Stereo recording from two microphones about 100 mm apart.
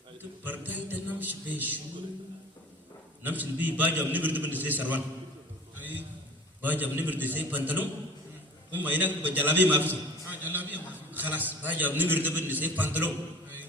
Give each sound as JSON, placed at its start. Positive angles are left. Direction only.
{"t": 0.2, "sound": "a sound", "side_deg": -20}
{"t": 3.2, "sound": "a man's voice", "side_deg": -15}
{"t": 6.6, "sound": "a man's voice", "side_deg": -20}